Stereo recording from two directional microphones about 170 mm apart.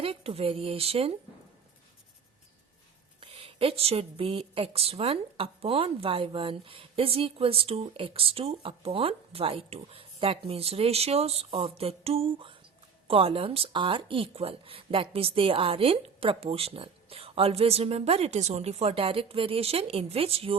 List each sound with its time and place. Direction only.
0.0 s a woman's voice: 35° right (ahead or behind)
3.2 s a woman's voice: 35° right (ahead or behind)